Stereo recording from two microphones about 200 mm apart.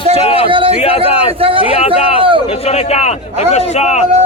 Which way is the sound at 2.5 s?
30° left (ahead or behind).